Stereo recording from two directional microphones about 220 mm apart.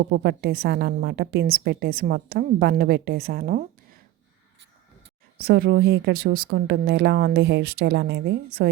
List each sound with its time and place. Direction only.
0.0 s a woman's voice: 50° right (ahead or behind)
5.4 s a woman's voice: 45° right (ahead or behind)